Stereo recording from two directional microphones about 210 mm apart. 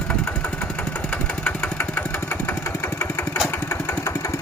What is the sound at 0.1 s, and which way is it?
Engine, 5° left (ahead or behind).